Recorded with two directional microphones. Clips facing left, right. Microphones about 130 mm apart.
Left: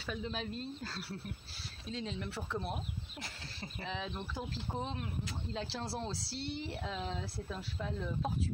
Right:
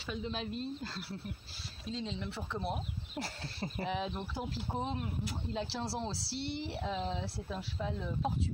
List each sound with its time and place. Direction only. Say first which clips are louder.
0.3 s speech: right 2 dB; centre (ahead or behind)
3.2 s speech: right 7 dB; 35° right (ahead or behind)
3.9 s speech: right 4 dB; 10° right (ahead or behind)